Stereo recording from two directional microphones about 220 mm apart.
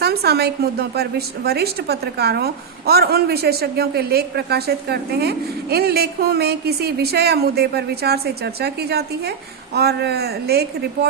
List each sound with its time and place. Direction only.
0.0 s a woman's voice: 45° right (ahead or behind)